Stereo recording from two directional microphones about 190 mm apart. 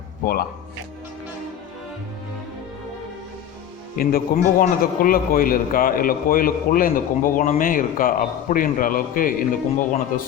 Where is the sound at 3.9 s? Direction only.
50° left (ahead or behind).